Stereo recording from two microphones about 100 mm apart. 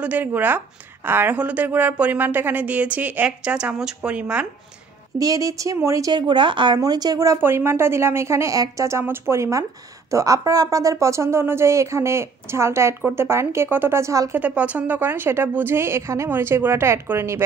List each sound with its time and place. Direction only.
0.0 s a woman's voice: 15° right (ahead or behind)
5.2 s a woman's voice: 35° right (ahead or behind)
6.1 s speech: 50° right (ahead or behind)
6.8 s a woman's voice: 45° right (ahead or behind)
7.3 s a woman's voice: 25° right (ahead or behind)
14.3 s speech: 15° right (ahead or behind)